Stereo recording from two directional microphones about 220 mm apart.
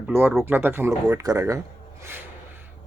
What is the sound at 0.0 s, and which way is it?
Speech, 5° right (ahead or behind).